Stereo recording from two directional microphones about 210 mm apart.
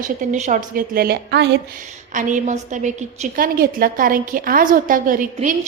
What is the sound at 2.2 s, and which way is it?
A woman's voice, 35° right (ahead or behind).